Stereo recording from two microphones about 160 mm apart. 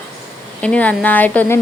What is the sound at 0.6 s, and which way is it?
Speech, 10° left (ahead or behind).